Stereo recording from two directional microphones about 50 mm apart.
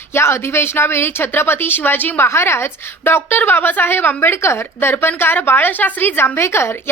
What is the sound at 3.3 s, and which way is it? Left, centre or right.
A woman's voice, left.